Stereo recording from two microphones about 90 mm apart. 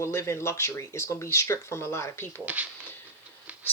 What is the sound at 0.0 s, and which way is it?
Speech, 30° left (ahead or behind).